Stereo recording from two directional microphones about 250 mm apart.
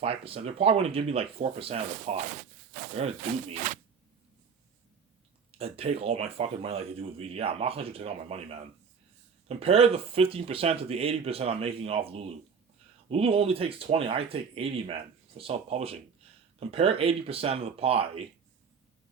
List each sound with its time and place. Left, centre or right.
0.0 s speech: right
3.5 s speech: right
5.5 s speech: right